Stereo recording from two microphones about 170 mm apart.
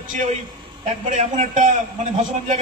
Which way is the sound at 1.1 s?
45° right (ahead or behind).